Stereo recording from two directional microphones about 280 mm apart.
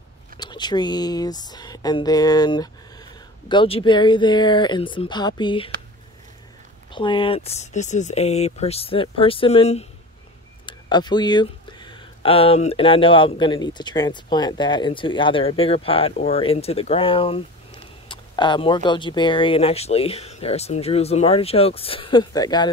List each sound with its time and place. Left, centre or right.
0.4 s speech: centre
6.9 s speech: centre